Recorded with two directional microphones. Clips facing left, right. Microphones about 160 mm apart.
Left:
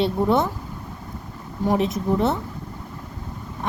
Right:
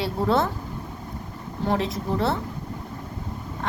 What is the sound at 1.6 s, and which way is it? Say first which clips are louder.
Speech: left 4 dB; 20° left (ahead or behind).